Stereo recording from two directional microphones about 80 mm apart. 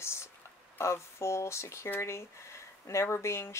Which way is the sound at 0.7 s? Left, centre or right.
Left.